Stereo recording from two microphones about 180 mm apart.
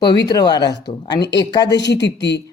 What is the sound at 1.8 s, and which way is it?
Speech, 75° left (ahead or behind).